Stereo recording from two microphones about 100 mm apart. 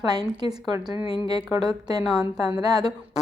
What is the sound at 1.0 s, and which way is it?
Speech, 65° left (ahead or behind).